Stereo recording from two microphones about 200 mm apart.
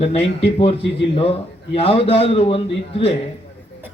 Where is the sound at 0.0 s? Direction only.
30° left (ahead or behind).